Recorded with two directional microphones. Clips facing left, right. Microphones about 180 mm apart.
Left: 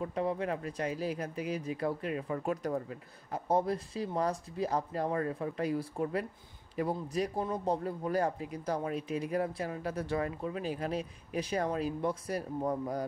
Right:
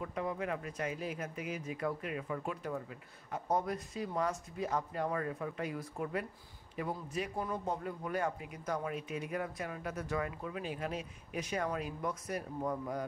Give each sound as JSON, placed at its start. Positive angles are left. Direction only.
{"t": 0.0, "sound": "speech", "side_deg": 30}